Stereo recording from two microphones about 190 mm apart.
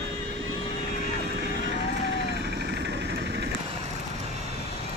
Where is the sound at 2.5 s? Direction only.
60° right (ahead or behind).